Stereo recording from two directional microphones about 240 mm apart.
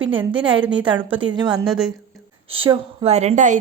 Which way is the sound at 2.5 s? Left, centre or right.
Right.